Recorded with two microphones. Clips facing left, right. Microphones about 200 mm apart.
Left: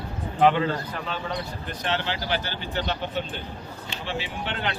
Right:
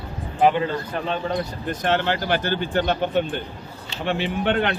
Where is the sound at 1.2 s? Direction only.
50° right (ahead or behind).